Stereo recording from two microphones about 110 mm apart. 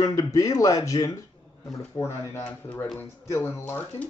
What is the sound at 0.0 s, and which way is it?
Speech, 30° left (ahead or behind).